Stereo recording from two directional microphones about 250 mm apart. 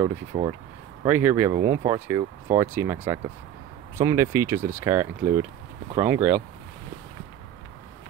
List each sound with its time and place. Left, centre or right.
0.3 s speech: centre
1.0 s speech: centre